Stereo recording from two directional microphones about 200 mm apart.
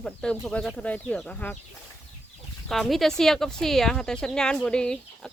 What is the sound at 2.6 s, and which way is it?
Speech, centre (ahead or behind).